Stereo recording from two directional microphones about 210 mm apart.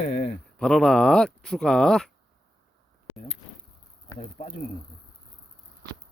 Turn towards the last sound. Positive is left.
turn(degrees=40)  # may be behind; listen again after turning